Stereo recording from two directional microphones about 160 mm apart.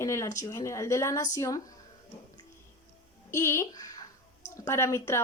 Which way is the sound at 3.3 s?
15° left (ahead or behind).